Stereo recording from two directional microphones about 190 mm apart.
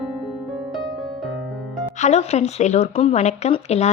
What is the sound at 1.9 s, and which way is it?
Speech, 35° left (ahead or behind).